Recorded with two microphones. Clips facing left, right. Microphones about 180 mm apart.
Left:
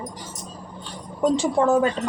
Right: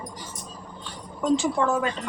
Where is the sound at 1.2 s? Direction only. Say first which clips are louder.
Left 3 dB; 35° left (ahead or behind).